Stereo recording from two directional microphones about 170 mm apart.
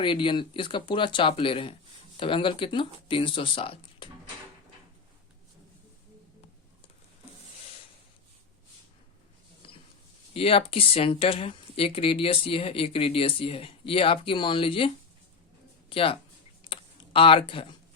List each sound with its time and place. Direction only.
0.0 s speech: 30° left (ahead or behind)
10.3 s speech: 35° left (ahead or behind)
16.6 s computer keyboard: 30° left (ahead or behind)